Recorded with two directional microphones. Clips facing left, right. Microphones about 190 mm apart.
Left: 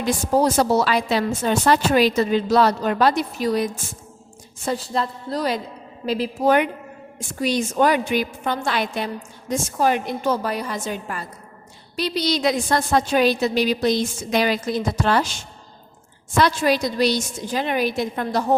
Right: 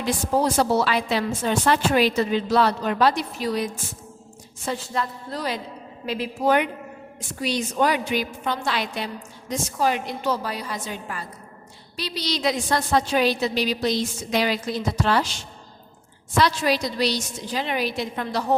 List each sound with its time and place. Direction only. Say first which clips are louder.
0.4 s a woman's voice: left 1 dB; 40° left (ahead or behind)